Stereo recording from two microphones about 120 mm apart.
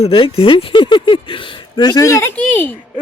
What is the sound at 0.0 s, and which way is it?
Speech, 55° left (ahead or behind).